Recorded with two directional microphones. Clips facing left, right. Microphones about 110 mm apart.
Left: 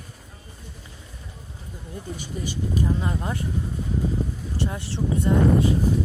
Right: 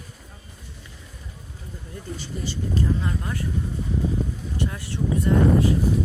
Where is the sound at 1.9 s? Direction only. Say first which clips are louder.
Left 1 dB; 15° left (ahead or behind).